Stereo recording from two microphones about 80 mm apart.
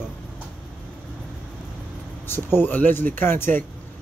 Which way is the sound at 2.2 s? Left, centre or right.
Left.